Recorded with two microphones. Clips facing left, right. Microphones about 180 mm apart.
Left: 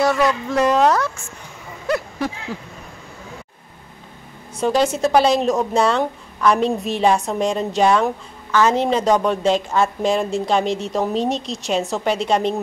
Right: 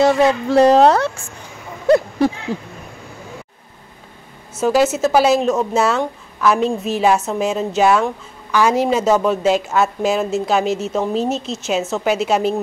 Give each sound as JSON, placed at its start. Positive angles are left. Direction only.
{"t": 0.0, "sound": "a woman's voice", "side_deg": -30}
{"t": 1.9, "sound": "a sound", "side_deg": -30}
{"t": 4.6, "sound": "speech", "side_deg": -5}